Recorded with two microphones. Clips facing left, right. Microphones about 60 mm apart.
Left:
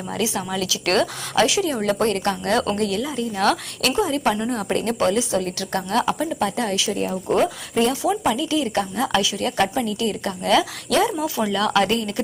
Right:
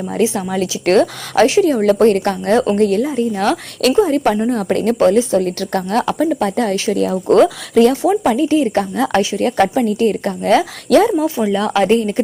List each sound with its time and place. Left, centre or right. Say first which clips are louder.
0.2 s a woman's voice: right 8 dB; right
6.9 s speech: right 11 dB; right
8.0 s a woman's voice: right 7 dB; right
11.3 s speech: right 4 dB; right